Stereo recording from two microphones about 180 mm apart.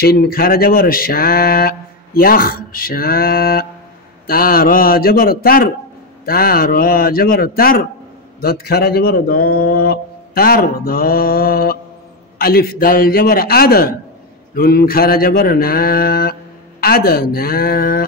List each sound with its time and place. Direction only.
0.0 s speech: 60° left (ahead or behind)